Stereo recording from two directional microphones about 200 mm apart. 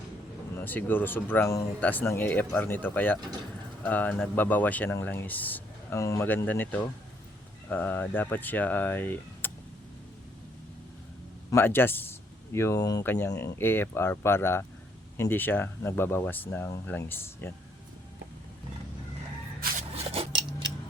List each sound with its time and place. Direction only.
0.5 s speech: 10° left (ahead or behind)
11.5 s speech: 10° left (ahead or behind)
20.1 s a sound: 25° right (ahead or behind)